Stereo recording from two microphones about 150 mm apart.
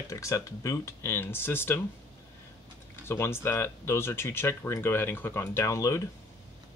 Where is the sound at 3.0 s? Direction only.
15° left (ahead or behind).